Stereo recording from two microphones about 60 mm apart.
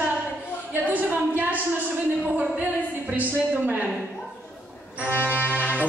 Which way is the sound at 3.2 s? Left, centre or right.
Right.